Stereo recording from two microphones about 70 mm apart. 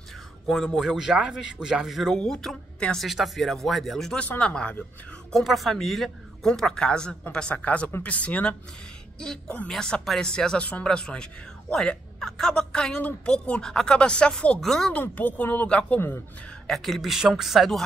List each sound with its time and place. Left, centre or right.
0.5 s speech: centre
4.2 s speech: centre
5.3 s speech: centre
14.9 s speech: left
16.6 s speech: centre